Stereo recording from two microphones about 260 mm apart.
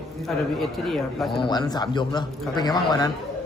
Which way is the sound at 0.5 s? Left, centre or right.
Centre.